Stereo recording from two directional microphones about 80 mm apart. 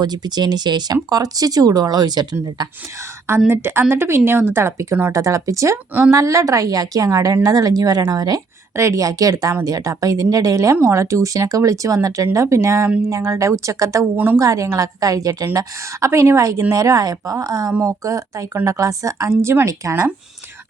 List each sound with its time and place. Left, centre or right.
0.0 s a woman's voice: right
3.0 s a woman's voice: right
5.7 s a woman's voice: right
6.1 s a woman's voice: right
8.7 s a woman's voice: right
14.0 s a woman's voice: right
14.3 s a woman's voice: right